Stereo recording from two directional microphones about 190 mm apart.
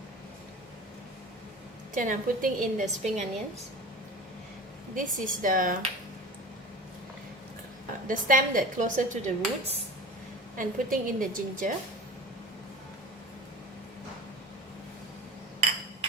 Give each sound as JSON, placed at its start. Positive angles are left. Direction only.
{"t": 2.0, "sound": "speech", "side_deg": -45}
{"t": 4.9, "sound": "speech", "side_deg": -45}
{"t": 8.0, "sound": "speech", "side_deg": -45}